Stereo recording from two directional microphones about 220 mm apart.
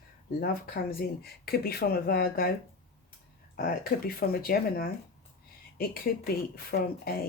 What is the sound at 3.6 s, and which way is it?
Speech, 40° left (ahead or behind).